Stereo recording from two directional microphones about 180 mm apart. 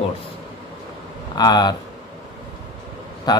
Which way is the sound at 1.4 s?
20° left (ahead or behind).